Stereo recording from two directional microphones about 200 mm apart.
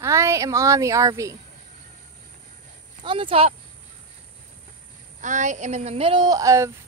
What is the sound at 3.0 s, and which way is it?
Speech, 25° right (ahead or behind).